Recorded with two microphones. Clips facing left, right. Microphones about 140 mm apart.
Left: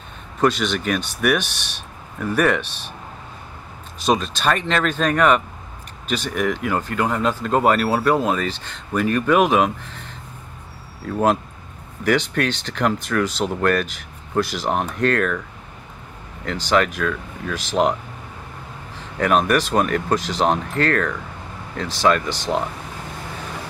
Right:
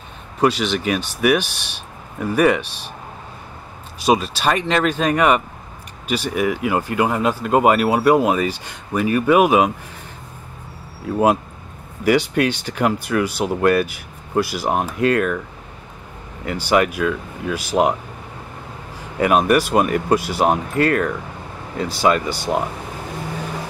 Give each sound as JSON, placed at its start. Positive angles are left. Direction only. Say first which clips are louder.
{"t": 0.4, "sound": "speech", "louder": "right 1 dB", "side_deg": -10}
{"t": 4.0, "sound": "speech", "louder": "right 2 dB", "side_deg": -10}
{"t": 11.1, "sound": "speech", "louder": "right 2 dB", "side_deg": -10}
{"t": 16.4, "sound": "speech", "louder": "right 2 dB", "side_deg": -10}
{"t": 18.9, "sound": "speech", "louder": "right 2 dB", "side_deg": -10}